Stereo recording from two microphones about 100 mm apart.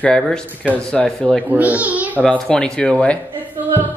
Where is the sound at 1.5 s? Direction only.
15° right (ahead or behind).